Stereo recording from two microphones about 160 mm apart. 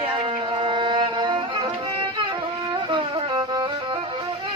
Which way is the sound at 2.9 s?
30° right (ahead or behind).